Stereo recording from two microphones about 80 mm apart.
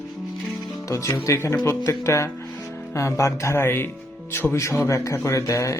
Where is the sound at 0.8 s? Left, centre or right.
Left.